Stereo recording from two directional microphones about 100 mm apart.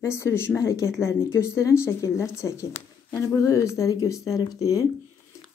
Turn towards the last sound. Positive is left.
turn(degrees=35)  # may be behind; listen again after turning